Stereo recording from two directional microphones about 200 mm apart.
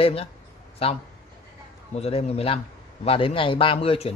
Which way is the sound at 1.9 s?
30° left (ahead or behind).